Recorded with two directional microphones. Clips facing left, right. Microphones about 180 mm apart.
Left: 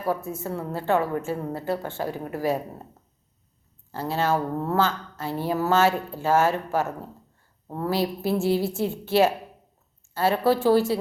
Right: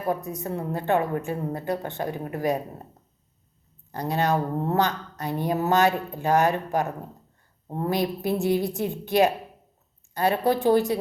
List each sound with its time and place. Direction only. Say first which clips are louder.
0.0 s a woman's voice: even; 20° right (ahead or behind)
3.9 s a woman's voice: even; 15° right (ahead or behind)